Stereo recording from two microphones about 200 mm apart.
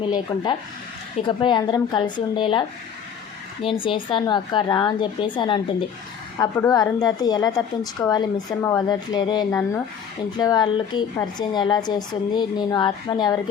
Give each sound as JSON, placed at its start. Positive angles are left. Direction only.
{"t": 0.0, "sound": "a woman's voice", "side_deg": 20}